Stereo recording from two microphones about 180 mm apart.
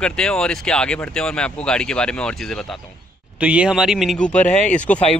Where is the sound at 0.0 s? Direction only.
5° left (ahead or behind).